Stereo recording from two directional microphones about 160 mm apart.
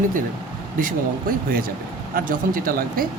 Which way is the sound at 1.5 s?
65° right (ahead or behind).